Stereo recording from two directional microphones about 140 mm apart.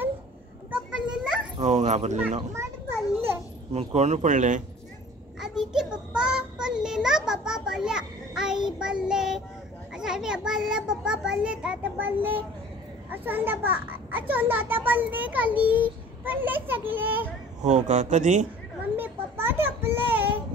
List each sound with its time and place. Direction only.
0.7 s a sound: 5° right (ahead or behind)
1.6 s speech: 55° right (ahead or behind)
2.5 s children playing: 20° right (ahead or behind)
3.7 s speech: 55° right (ahead or behind)
5.4 s child singing: 5° right (ahead or behind)
8.6 s a child's voice: 5° right (ahead or behind)
17.6 s speech: 55° right (ahead or behind)
18.9 s a sound: 15° right (ahead or behind)